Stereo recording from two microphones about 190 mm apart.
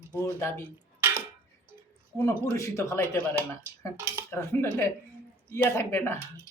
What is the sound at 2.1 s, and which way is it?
Speech, 15° left (ahead or behind).